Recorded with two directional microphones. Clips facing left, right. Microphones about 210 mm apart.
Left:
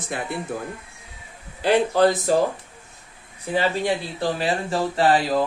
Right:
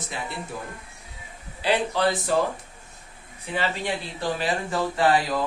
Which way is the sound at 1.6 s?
45° left (ahead or behind).